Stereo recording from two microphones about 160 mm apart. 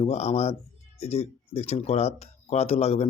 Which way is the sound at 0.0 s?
40° left (ahead or behind).